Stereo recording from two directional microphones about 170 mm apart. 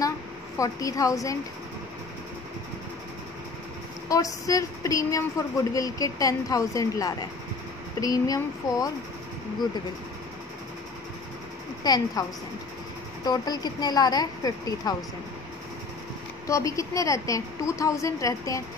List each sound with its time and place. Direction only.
0.6 s speech: 20° left (ahead or behind)
4.1 s speech: 20° left (ahead or behind)
11.8 s speech: 20° left (ahead or behind)
16.4 s speech: 20° left (ahead or behind)